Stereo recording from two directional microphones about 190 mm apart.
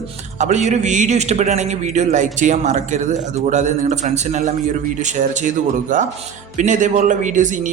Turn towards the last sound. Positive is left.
turn(degrees=-40)  # may be behind; listen again after turning